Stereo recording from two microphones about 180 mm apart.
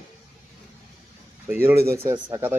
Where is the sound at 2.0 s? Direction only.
15° right (ahead or behind).